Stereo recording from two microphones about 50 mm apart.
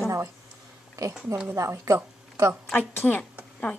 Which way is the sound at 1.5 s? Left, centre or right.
Right.